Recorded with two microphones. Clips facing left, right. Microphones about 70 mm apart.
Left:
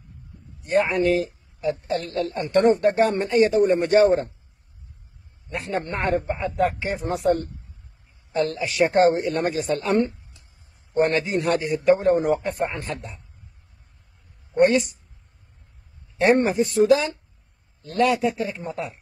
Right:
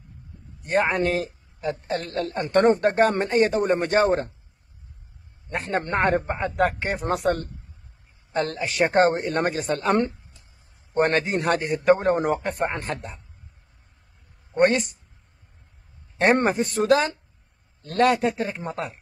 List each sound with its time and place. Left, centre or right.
0.6 s a man's voice: right
5.5 s a man's voice: right
8.3 s a man's voice: right
14.6 s a man's voice: right
16.2 s a man's voice: right